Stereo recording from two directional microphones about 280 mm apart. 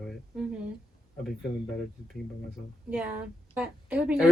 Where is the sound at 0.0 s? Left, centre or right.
Centre.